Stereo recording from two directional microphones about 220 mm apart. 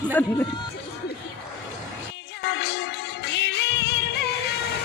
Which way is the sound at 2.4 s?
50° left (ahead or behind).